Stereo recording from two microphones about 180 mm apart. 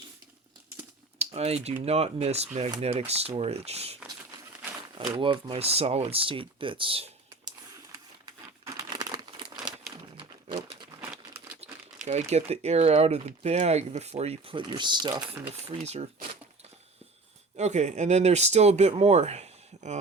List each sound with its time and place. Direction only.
1.2 s speech: 35° right (ahead or behind)
4.9 s speech: 30° right (ahead or behind)
8.6 s crumpling: 20° right (ahead or behind)
9.6 s crumpling: 5° right (ahead or behind)
10.2 s a sound: 25° right (ahead or behind)
11.6 s crumpling: 35° right (ahead or behind)
12.3 s speech: 35° right (ahead or behind)
15.6 s speech: 35° right (ahead or behind)
17.6 s speech: 40° right (ahead or behind)